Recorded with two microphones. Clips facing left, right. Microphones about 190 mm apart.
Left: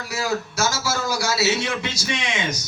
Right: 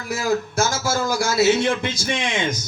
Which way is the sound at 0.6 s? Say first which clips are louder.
Right 3 dB; 50° right (ahead or behind).